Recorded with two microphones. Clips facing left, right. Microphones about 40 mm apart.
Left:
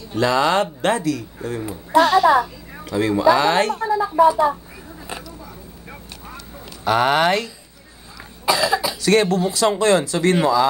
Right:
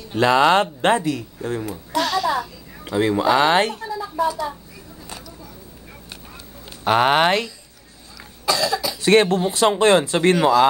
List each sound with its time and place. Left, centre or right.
0.1 s a man's voice: right
1.7 s a child's voice: centre
2.8 s speech: right
3.7 s speech: left
6.8 s a man's voice: right
8.5 s cough: centre
9.0 s a man's voice: right